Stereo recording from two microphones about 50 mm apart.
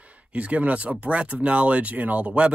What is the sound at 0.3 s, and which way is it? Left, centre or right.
Speech, right.